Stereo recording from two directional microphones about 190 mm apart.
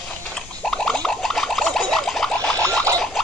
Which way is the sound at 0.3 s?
5° left (ahead or behind).